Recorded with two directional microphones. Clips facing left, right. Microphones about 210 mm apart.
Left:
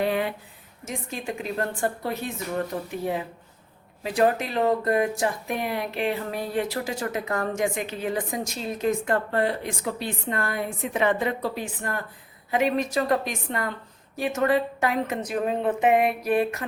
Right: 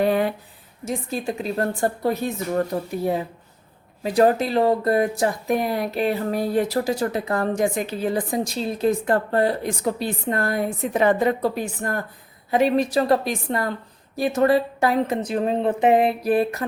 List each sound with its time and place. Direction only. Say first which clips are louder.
0.0 s speech: right 5 dB; 40° right (ahead or behind)